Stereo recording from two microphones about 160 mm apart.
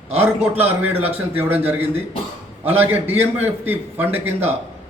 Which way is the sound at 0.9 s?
40° right (ahead or behind).